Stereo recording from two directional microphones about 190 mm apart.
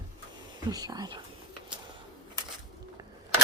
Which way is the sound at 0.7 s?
20° right (ahead or behind).